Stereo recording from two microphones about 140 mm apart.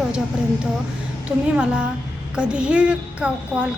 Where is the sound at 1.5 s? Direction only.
10° right (ahead or behind).